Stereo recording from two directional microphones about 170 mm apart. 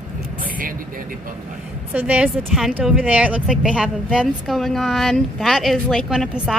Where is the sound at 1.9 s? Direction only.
10° right (ahead or behind).